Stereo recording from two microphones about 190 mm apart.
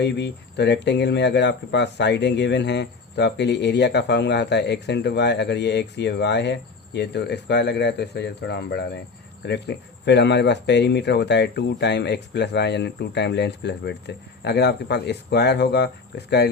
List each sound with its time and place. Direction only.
0.0 s speech: 65° left (ahead or behind)